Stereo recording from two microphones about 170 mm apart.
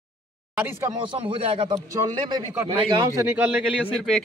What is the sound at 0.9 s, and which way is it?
A man's voice, 30° right (ahead or behind).